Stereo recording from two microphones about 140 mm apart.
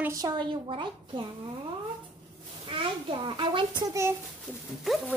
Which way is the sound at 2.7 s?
35° right (ahead or behind).